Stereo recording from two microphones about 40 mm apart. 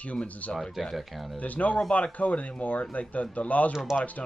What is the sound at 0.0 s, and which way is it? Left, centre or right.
Speech, left.